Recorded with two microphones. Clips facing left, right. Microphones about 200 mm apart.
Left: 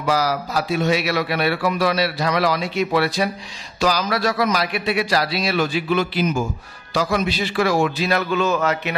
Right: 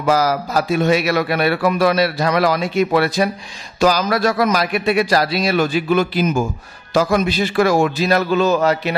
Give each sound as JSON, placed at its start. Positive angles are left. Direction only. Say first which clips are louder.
{"t": 0.0, "sound": "a man's voice", "louder": "right 4 dB", "side_deg": -50}